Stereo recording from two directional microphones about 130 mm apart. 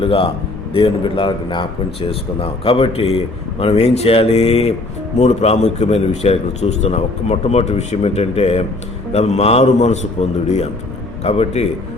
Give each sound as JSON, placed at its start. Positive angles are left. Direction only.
{"t": 0.0, "sound": "a man's voice", "side_deg": 45}